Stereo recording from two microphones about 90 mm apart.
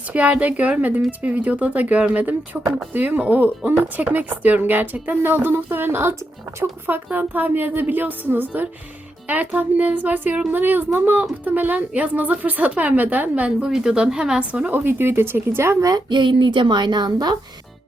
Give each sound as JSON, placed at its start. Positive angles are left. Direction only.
{"t": 0.1, "sound": "a woman's voice", "side_deg": -15}
{"t": 16.0, "sound": "speech", "side_deg": -60}